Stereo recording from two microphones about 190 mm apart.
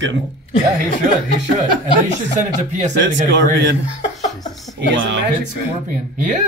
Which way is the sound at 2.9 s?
65° right (ahead or behind).